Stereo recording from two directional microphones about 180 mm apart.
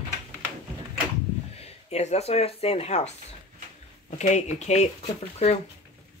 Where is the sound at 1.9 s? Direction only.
35° left (ahead or behind).